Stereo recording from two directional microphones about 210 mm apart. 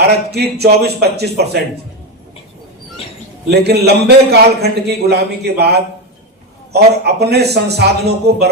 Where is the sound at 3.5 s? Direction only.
50° right (ahead or behind).